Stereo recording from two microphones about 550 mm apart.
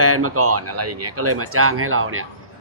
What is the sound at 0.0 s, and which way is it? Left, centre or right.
A man's voice, right.